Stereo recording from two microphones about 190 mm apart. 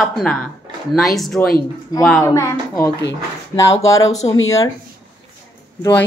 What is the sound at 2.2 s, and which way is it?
Speech, 15° left (ahead or behind).